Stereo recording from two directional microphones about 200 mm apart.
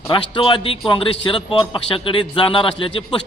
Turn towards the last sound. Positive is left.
turn(degrees=25)  # may be behind; listen again after turning